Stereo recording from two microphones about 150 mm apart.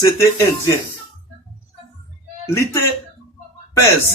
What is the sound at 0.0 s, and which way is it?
Speech, 20° left (ahead or behind).